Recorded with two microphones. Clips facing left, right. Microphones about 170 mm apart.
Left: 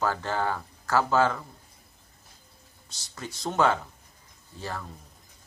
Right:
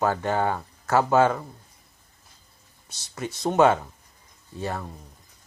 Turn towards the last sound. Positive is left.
turn(degrees=-25)  # may be behind; listen again after turning